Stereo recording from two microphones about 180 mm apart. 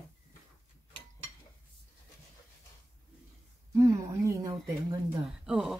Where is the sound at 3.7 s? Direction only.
20° right (ahead or behind).